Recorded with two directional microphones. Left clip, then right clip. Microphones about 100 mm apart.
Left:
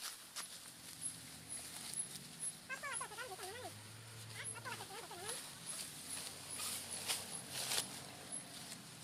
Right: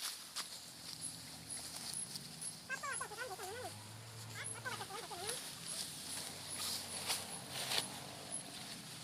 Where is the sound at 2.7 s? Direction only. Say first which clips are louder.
Right 2 dB; 25° left (ahead or behind).